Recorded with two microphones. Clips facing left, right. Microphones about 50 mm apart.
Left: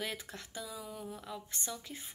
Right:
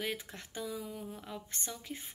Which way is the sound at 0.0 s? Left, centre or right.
Right.